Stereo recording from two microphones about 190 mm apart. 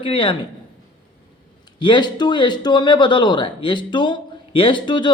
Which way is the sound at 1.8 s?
25° left (ahead or behind).